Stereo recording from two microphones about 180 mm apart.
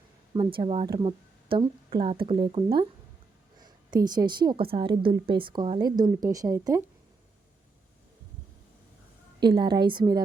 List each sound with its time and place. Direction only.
0.3 s a woman's voice: 30° right (ahead or behind)
9.4 s a woman's voice: 25° right (ahead or behind)